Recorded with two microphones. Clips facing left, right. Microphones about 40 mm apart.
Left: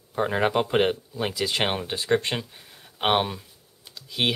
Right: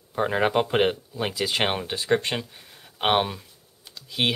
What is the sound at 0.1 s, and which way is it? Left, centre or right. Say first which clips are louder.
Speech: right 1 dB; centre.